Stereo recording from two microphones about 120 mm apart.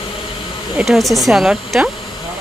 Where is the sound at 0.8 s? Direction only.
Centre (ahead or behind).